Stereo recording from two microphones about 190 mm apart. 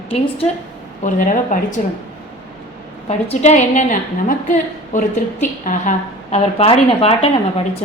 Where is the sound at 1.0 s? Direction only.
40° left (ahead or behind).